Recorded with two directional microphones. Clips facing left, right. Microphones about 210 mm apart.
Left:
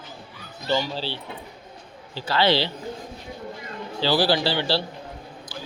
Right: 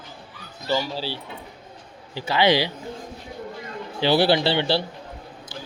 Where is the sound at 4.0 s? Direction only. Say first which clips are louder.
Right 3 dB; 20° right (ahead or behind).